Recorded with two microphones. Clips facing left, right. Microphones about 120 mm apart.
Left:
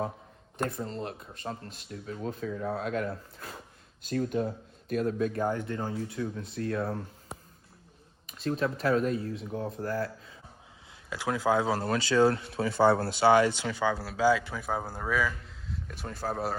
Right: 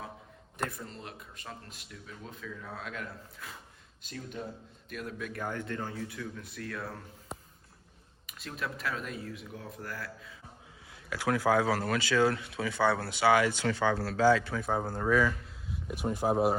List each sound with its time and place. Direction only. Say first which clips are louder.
0.9 s speech: left 8 dB; 35° left (ahead or behind)
4.1 s speech: left 12 dB; 50° left (ahead or behind)
4.9 s speech: left 11 dB; 35° left (ahead or behind)
8.4 s speech: left 9 dB; 35° left (ahead or behind)
11.1 s speech: even; 20° left (ahead or behind)
13.7 s speech: right 1 dB; 5° left (ahead or behind)
15.7 s speech: right 6 dB; 15° right (ahead or behind)